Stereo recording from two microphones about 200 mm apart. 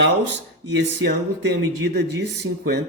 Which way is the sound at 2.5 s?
90° right.